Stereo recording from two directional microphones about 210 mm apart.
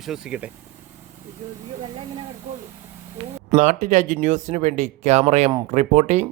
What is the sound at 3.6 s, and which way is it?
Speech, 35° right (ahead or behind).